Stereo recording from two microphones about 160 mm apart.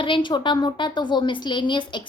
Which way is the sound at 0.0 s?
30° left (ahead or behind).